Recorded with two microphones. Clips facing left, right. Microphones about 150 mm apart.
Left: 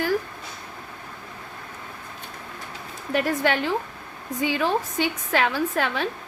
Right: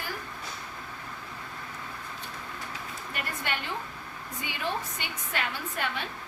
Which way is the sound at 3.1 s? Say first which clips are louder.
Left 13 dB; 90° left.